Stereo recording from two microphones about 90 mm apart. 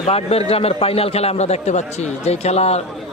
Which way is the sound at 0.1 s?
90° left.